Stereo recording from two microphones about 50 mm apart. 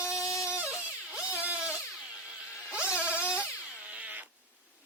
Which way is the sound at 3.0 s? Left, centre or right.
Right.